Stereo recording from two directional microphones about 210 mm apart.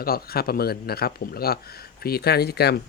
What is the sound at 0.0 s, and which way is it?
Speech, 45° left (ahead or behind).